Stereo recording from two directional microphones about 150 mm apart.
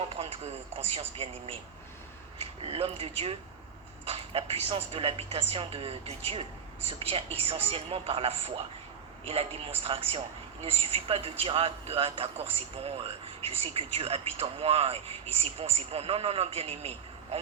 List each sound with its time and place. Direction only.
0.1 s a man's voice: 45° right (ahead or behind)